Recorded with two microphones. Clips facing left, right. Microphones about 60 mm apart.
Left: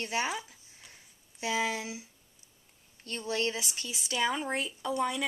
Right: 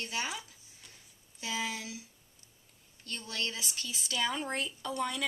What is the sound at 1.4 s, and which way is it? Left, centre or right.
Speech, left.